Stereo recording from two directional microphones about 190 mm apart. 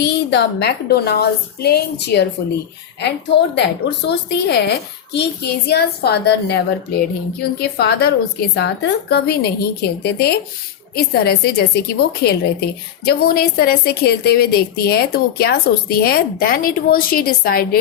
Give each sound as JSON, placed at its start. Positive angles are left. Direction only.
{"t": 0.0, "sound": "a woman's voice", "side_deg": 65}
{"t": 7.6, "sound": "a woman's voice", "side_deg": 55}